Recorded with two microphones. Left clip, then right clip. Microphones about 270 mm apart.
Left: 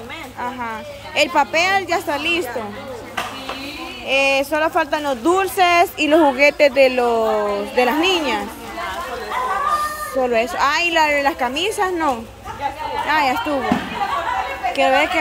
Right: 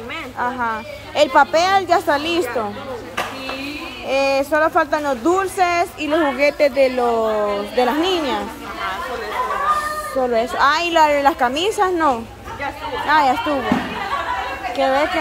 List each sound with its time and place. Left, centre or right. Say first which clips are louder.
0.4 s speech: right 5 dB; centre
4.1 s speech: even; centre
10.2 s speech: right 1 dB; centre
14.7 s speech: left 2 dB; centre